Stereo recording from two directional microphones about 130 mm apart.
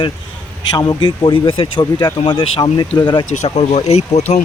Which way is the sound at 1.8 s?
30° left (ahead or behind).